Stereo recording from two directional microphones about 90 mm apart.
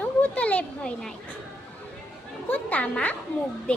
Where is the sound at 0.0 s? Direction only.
15° left (ahead or behind).